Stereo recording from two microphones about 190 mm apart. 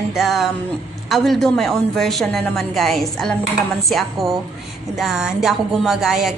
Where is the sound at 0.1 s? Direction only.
Centre (ahead or behind).